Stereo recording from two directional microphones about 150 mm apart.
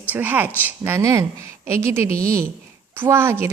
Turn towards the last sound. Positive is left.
turn(degrees=-15)  # may be behind; listen again after turning